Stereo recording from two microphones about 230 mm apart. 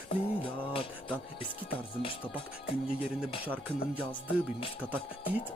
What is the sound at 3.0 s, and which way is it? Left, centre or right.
Music, centre.